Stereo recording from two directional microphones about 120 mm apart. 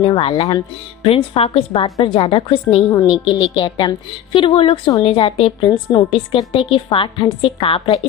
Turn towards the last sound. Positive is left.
turn(degrees=50)  # may be behind; listen again after turning